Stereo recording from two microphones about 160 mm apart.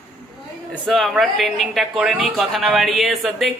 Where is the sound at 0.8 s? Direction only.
Centre (ahead or behind).